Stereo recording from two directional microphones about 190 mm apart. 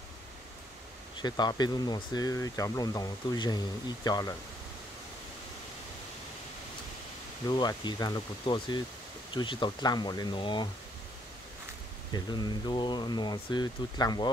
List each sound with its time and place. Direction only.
1.2 s speech: 20° left (ahead or behind)
7.4 s speech: 20° left (ahead or behind)
12.1 s speech: 20° left (ahead or behind)